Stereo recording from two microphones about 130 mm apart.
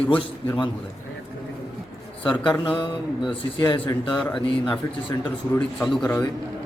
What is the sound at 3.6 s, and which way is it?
Speech, 35° left (ahead or behind).